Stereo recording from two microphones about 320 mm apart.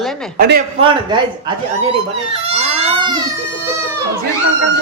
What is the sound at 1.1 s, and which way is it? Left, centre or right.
Speech, centre.